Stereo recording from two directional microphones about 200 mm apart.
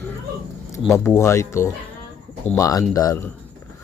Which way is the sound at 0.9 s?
10° left (ahead or behind).